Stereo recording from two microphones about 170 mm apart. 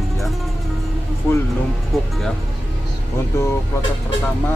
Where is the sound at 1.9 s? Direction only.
Centre (ahead or behind).